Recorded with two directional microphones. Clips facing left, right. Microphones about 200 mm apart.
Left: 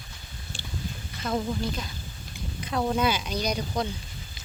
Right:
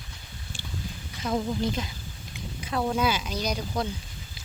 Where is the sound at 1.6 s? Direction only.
20° right (ahead or behind).